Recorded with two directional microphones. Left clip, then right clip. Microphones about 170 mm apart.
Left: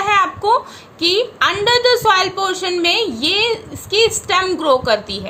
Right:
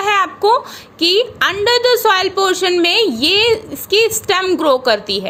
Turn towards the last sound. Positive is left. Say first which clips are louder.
# right 2 dB
turn(degrees=-45)  # may be behind; listen again after turning